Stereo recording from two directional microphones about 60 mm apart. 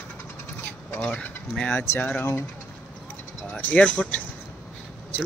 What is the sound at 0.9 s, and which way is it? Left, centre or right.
Speech, left.